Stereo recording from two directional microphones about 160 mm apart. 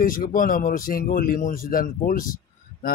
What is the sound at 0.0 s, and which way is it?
Speech, 60° left (ahead or behind).